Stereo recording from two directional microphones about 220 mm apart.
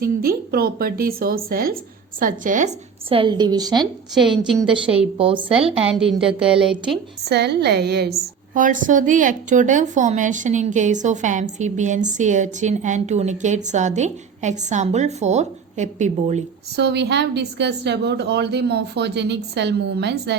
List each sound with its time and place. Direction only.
0.0 s a woman's voice: 45° right (ahead or behind); by 3.8 s 20° right (ahead or behind)
4.4 s a woman's voice: 5° right (ahead or behind)
4.9 s a woman's voice: 25° right (ahead or behind)
5.8 s a woman's voice: 5° right (ahead or behind)
7.3 s a woman's voice: 50° right (ahead or behind)
8.5 s a woman's voice: 35° right (ahead or behind)
16.7 s a woman's voice: 50° right (ahead or behind)